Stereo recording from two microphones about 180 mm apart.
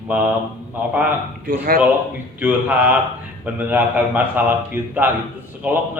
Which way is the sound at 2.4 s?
10° right (ahead or behind).